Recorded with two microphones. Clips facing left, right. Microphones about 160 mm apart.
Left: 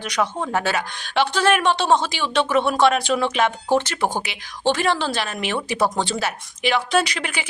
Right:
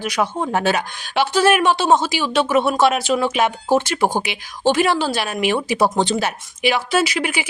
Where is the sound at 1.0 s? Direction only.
5° right (ahead or behind).